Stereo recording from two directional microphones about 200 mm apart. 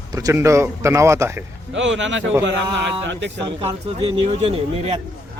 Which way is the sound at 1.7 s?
65° right (ahead or behind).